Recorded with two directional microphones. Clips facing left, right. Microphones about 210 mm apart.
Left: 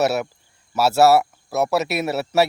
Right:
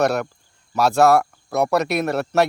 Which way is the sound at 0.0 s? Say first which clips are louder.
Right 1 dB; 5° left (ahead or behind).